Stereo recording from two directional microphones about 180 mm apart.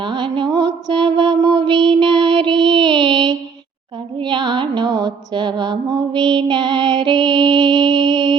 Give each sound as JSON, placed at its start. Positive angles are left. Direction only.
{"t": 0.0, "sound": "mantra", "side_deg": -25}
{"t": 2.6, "sound": "music", "side_deg": -25}
{"t": 4.2, "sound": "mantra", "side_deg": -25}